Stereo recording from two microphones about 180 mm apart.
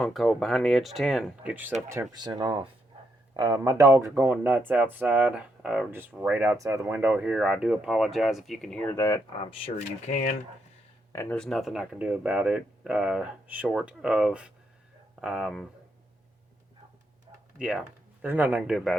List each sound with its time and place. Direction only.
0.0 s speech: centre (ahead or behind); by 9.5 s 20° left (ahead or behind)
9.5 s speech: 35° left (ahead or behind)
11.1 s speech: 15° left (ahead or behind)
11.3 s speech: centre (ahead or behind)
17.6 s speech: 5° right (ahead or behind)